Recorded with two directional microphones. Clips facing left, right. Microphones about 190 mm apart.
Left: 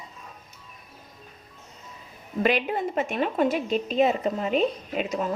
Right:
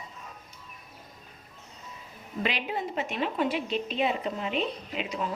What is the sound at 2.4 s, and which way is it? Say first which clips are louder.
A woman's voice: left 7 dB; 50° left (ahead or behind).